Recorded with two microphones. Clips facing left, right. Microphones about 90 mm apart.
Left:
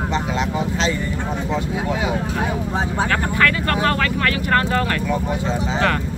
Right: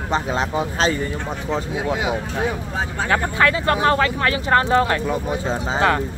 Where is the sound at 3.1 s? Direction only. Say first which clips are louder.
Right 3 dB; 20° right (ahead or behind).